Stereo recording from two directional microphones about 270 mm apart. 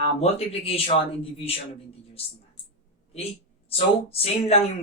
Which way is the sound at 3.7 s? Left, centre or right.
Left.